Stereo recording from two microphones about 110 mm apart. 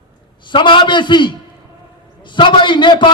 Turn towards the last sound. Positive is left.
turn(degrees=45)  # may be behind; listen again after turning